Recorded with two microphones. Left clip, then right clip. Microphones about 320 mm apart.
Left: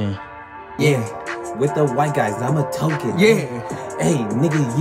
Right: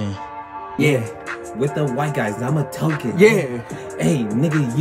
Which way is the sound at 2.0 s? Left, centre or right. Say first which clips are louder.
Left 3 dB; centre.